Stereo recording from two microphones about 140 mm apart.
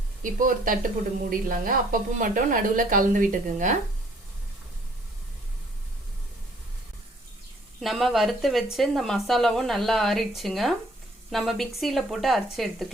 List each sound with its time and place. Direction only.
0.2 s a woman's voice: 70° right (ahead or behind)
7.8 s a woman's voice: centre (ahead or behind)